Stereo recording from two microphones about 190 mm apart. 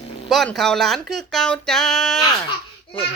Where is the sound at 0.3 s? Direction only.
Centre (ahead or behind).